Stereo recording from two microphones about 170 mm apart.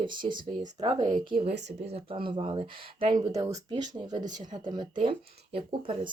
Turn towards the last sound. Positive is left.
turn(degrees=-30)  # may be behind; listen again after turning